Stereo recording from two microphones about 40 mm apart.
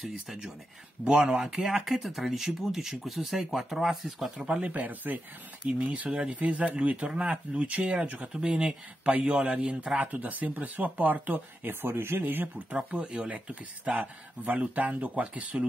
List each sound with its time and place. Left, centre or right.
0.0 s speech: centre
4.6 s speech: right
5.6 s speech: right
6.1 s speech: right
6.4 s speech: right
7.7 s speech: right
8.3 s speech: right
9.9 s speech: right
11.8 s speech: right
13.0 s speech: right
13.3 s speech: right